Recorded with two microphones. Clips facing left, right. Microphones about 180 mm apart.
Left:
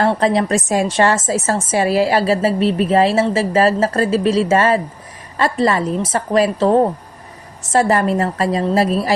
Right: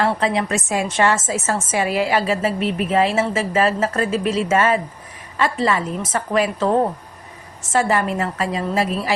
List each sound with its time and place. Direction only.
0.0 s a woman's voice: 35° left (ahead or behind)